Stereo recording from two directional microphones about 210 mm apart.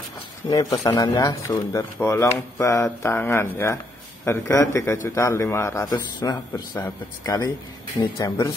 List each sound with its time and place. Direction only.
0.5 s a man's voice: 15° left (ahead or behind)